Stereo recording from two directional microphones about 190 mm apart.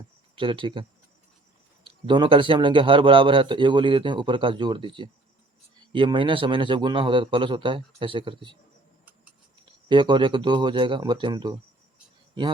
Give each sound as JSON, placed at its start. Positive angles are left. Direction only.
{"t": 0.3, "sound": "a man's voice", "side_deg": -25}
{"t": 9.9, "sound": "a man's voice", "side_deg": -25}